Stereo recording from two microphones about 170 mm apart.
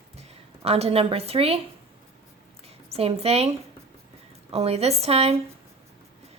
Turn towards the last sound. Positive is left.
turn(degrees=-35)  # may be behind; listen again after turning